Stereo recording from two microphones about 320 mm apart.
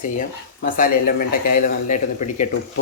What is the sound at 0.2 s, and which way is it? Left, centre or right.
Speech, left.